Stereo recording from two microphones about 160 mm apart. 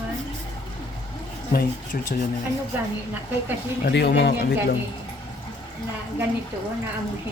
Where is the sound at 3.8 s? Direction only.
90° left.